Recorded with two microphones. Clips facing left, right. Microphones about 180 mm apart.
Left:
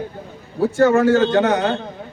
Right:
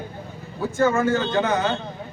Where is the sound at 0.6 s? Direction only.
70° left (ahead or behind).